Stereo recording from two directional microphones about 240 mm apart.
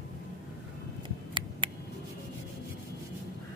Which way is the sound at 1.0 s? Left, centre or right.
Right.